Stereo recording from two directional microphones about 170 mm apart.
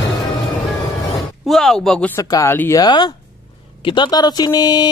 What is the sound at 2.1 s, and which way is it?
Speech, 20° left (ahead or behind).